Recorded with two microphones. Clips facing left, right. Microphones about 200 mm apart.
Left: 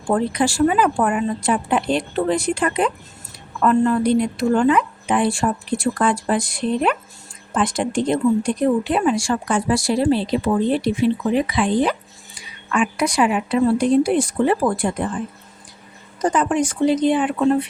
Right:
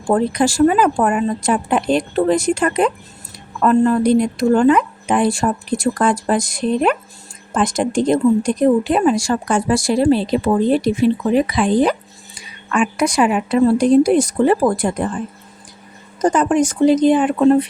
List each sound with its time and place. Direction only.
0.1 s speech: 45° right (ahead or behind)
16.2 s speech: 45° right (ahead or behind)